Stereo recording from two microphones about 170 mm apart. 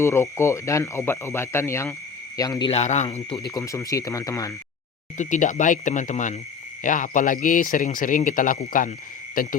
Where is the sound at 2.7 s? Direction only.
40° left (ahead or behind).